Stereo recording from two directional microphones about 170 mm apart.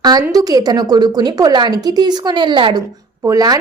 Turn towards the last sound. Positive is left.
turn(degrees=-20)  # may be behind; listen again after turning